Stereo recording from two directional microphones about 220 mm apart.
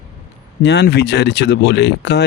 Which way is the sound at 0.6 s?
50° left (ahead or behind).